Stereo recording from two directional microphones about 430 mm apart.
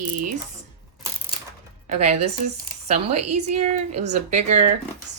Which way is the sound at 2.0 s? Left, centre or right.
Centre.